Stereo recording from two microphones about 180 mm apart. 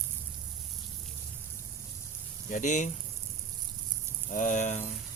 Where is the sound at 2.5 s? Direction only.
45° left (ahead or behind).